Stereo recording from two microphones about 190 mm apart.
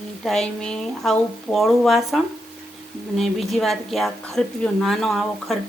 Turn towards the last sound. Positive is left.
turn(degrees=0)  # may be behind; listen again after turning